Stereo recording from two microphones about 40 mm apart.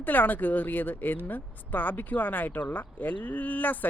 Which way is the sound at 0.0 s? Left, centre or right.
Left.